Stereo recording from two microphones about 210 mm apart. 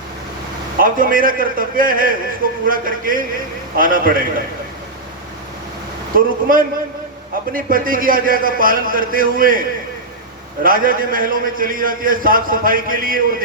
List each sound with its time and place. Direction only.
0.8 s a man's voice: 40° right (ahead or behind)
6.1 s a man's voice: 40° right (ahead or behind)